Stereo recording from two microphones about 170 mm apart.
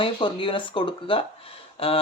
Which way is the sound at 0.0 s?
30° left (ahead or behind).